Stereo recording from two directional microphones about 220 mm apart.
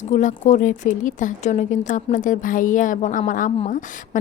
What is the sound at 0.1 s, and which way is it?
A woman's voice, 35° left (ahead or behind).